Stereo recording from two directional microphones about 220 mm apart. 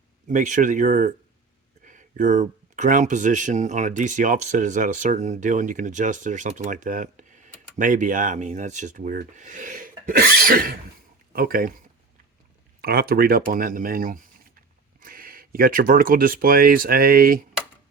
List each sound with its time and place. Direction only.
0.3 s speech: 35° right (ahead or behind)
12.8 s speech: 45° right (ahead or behind)